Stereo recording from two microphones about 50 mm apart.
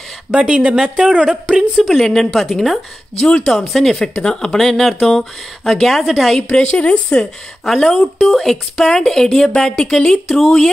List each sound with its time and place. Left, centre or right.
0.3 s a woman's voice: centre
2.0 s speech: centre
3.2 s speech: centre
3.5 s a woman's voice: centre
4.0 s a woman's voice: centre
6.6 s speech: left
6.9 s speech: centre
7.6 s a woman's voice: centre